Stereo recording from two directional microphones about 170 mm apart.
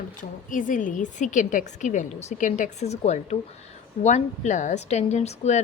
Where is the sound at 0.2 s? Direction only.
50° left (ahead or behind).